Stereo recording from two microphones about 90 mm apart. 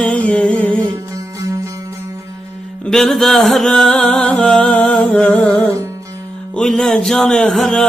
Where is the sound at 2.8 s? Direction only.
5° left (ahead or behind).